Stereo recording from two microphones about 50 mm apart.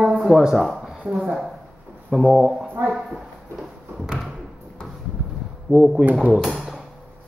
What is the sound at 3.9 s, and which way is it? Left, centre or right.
Thump, centre.